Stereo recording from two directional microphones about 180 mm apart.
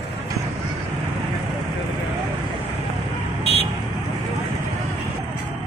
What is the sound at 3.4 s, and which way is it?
Vehicle, 35° left (ahead or behind).